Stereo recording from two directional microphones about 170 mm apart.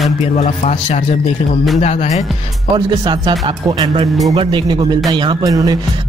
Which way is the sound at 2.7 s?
25° right (ahead or behind).